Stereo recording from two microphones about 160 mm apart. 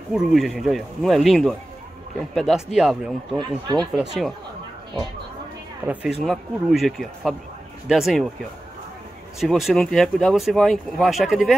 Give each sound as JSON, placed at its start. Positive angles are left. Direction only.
{"t": 0.1, "sound": "speech", "side_deg": 0}
{"t": 3.3, "sound": "speech", "side_deg": -25}
{"t": 3.9, "sound": "speech", "side_deg": 0}
{"t": 6.2, "sound": "speech", "side_deg": 0}
{"t": 9.4, "sound": "speech", "side_deg": 0}